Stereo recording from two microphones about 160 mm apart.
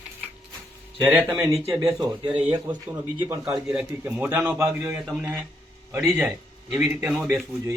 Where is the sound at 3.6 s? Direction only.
5° right (ahead or behind).